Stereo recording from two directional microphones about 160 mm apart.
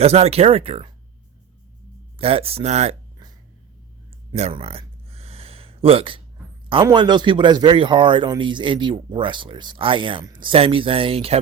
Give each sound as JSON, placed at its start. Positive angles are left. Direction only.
{"t": 0.0, "sound": "speech", "side_deg": -40}
{"t": 2.1, "sound": "speech", "side_deg": -35}
{"t": 4.4, "sound": "a sound", "side_deg": -40}
{"t": 6.8, "sound": "speech", "side_deg": -25}